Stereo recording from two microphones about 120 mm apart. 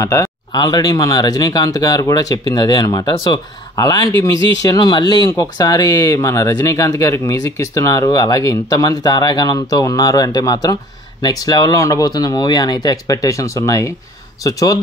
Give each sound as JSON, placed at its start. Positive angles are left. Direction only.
{"t": 0.0, "sound": "speech", "side_deg": 25}